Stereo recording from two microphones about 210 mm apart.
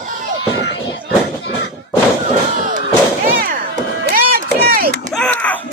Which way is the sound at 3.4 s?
40° right (ahead or behind).